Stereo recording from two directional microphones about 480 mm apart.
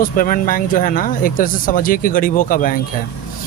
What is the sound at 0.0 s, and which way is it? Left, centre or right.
Speech, centre.